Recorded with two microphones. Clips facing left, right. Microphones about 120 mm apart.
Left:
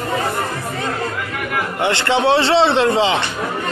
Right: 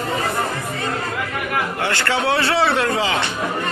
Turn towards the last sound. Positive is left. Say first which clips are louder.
# left 4 dB
turn(degrees=25)  # may be behind; listen again after turning